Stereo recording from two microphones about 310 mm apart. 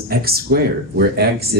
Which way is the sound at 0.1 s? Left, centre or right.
Right.